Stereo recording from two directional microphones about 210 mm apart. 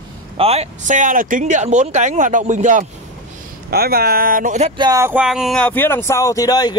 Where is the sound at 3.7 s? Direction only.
45° right (ahead or behind).